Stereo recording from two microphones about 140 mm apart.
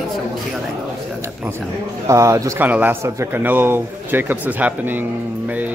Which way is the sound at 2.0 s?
20° right (ahead or behind).